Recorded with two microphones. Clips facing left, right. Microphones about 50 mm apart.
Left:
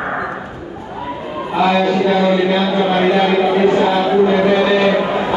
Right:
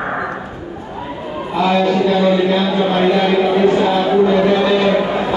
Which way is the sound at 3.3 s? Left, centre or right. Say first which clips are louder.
Even; left.